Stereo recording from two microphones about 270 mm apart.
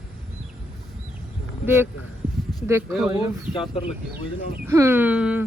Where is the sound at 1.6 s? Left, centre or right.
Centre.